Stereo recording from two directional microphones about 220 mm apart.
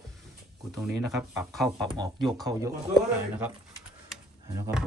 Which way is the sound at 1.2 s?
Centre (ahead or behind).